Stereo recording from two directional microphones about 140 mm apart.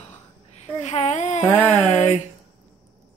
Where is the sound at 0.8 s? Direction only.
55° left (ahead or behind).